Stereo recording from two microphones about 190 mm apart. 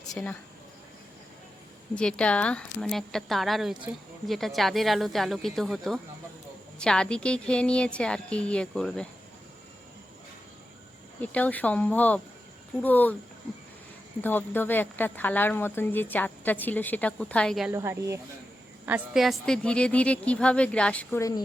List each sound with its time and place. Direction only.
0.1 s speech: 5° left (ahead or behind)
2.0 s speech: 5° left (ahead or behind)
11.2 s speech: 5° left (ahead or behind)
14.2 s speech: 10° left (ahead or behind)
17.7 s speech: 15° right (ahead or behind)
18.9 s speech: 5° right (ahead or behind); by 21.4 s 15° left (ahead or behind)